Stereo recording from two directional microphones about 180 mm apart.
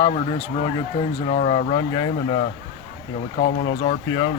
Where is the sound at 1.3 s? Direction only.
35° left (ahead or behind).